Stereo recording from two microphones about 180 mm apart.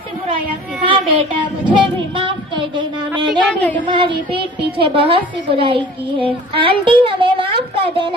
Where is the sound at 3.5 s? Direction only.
10° left (ahead or behind).